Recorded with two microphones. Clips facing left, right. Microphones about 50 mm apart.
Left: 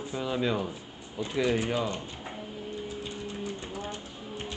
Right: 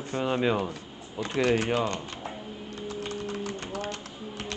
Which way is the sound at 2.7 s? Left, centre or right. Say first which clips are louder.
Right 4 dB; right.